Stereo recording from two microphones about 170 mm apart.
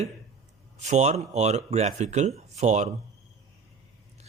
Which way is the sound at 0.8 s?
40° right (ahead or behind).